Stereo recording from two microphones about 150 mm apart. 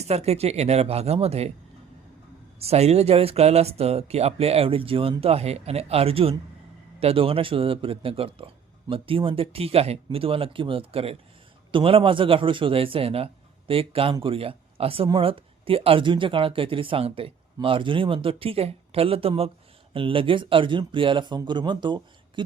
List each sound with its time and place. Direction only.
0.0 s speech: 45° right (ahead or behind)
2.6 s a man's voice: 45° right (ahead or behind)